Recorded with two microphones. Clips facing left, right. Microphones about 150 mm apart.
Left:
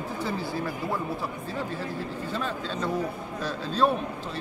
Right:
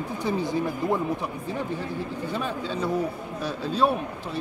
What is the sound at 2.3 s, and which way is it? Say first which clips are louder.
Speech: right 2 dB; 10° right (ahead or behind).